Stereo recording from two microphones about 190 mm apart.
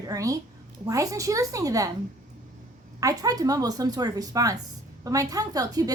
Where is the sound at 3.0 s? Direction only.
20° right (ahead or behind).